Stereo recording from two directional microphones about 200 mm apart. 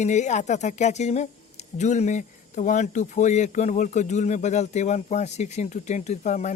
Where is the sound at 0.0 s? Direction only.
35° left (ahead or behind).